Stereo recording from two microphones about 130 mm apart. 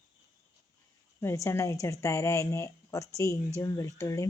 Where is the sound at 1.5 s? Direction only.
25° left (ahead or behind).